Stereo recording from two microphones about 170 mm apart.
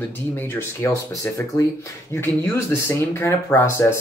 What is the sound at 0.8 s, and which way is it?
Speech, 15° left (ahead or behind).